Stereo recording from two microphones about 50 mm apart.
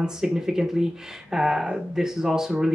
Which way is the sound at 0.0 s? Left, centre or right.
Centre.